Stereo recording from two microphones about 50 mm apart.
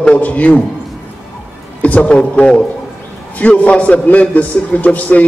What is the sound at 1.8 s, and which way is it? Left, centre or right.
A man's voice, left.